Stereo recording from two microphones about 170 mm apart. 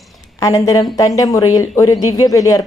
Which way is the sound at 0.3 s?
20° left (ahead or behind).